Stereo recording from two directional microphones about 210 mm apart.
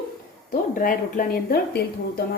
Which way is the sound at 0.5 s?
40° left (ahead or behind).